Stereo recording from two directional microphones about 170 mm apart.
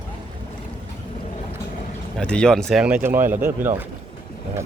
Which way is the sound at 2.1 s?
5° left (ahead or behind).